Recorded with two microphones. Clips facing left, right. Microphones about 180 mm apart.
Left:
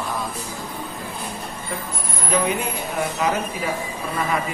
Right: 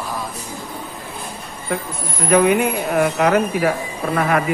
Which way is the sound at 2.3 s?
65° right (ahead or behind).